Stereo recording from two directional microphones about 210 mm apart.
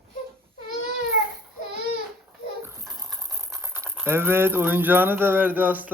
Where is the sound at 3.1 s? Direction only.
Centre (ahead or behind).